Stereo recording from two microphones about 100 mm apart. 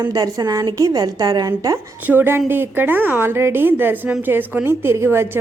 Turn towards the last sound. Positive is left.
turn(degrees=-25)  # may be behind; listen again after turning